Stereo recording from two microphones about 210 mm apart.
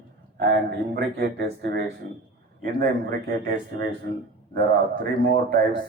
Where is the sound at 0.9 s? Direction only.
50° right (ahead or behind).